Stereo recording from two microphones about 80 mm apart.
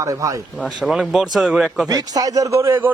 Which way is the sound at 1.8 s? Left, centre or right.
Right.